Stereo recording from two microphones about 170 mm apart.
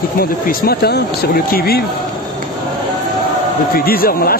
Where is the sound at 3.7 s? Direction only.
60° left (ahead or behind).